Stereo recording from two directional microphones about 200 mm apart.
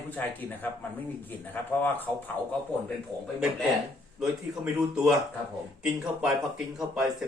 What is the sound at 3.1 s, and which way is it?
Speech, 20° right (ahead or behind).